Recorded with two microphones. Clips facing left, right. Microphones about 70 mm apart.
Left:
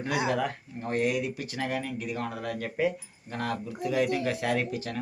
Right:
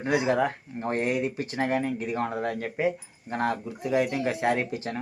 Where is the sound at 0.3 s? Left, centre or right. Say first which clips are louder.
Right 4 dB; right.